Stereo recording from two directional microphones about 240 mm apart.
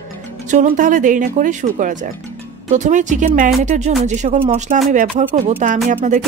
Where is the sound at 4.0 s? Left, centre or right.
Right.